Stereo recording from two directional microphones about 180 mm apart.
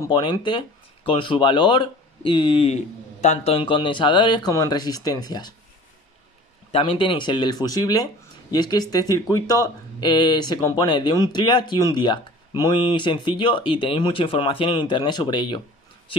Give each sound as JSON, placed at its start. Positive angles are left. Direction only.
{"t": 0.0, "sound": "speech", "side_deg": 25}
{"t": 6.7, "sound": "speech", "side_deg": 30}